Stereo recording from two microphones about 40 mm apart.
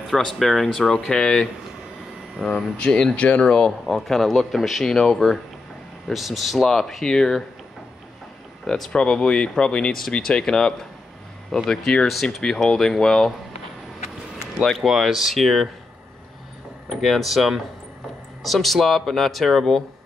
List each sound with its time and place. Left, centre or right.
0.1 s speech: centre
3.2 s speech: left
3.4 s speech: left
3.8 s speech: centre
4.8 s speech: centre
6.1 s speech: centre
8.9 s speech: centre
14.8 s speech: centre
16.9 s speech: centre